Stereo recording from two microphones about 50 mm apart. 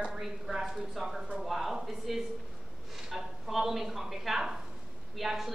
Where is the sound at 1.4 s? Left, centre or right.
Centre.